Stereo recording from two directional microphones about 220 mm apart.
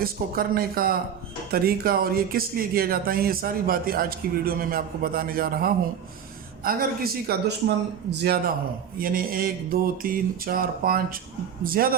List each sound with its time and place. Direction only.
0.0 s speech: 40° right (ahead or behind)